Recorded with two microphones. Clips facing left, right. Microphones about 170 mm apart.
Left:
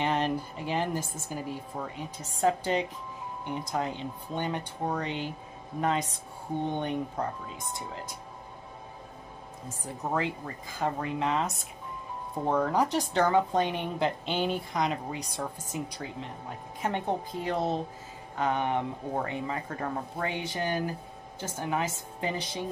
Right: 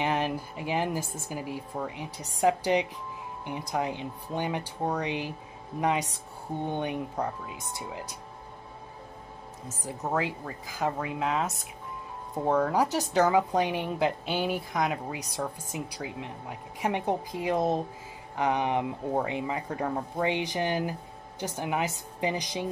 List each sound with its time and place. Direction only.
0.0 s a woman's voice: 10° right (ahead or behind)
9.8 s a woman's voice: 5° right (ahead or behind)